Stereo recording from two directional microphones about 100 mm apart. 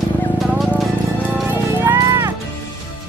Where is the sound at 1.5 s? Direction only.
20° right (ahead or behind).